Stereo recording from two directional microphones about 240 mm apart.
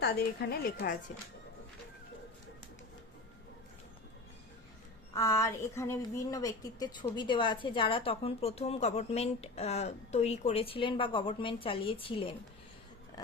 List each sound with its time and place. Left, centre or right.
0.0 s a woman's voice: left
5.1 s a woman's voice: centre